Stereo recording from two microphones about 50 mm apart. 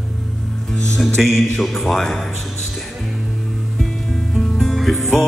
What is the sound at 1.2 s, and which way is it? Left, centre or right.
Speech, centre.